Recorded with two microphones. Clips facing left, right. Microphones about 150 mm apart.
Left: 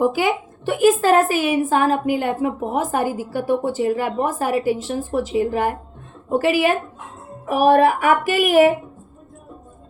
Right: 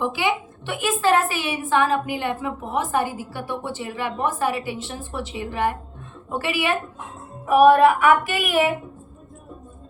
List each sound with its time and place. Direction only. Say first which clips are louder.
0.0 s a woman's voice: left 5 dB; 45° left (ahead or behind)